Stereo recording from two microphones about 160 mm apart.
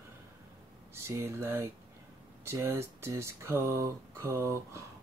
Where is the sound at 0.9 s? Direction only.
15° right (ahead or behind).